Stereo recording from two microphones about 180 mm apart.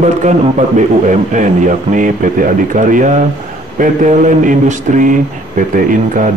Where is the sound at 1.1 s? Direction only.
45° right (ahead or behind).